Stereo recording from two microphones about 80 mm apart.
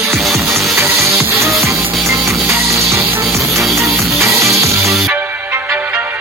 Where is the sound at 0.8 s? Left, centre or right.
Right.